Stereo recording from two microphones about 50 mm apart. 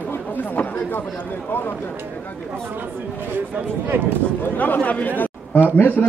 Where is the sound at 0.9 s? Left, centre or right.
Left.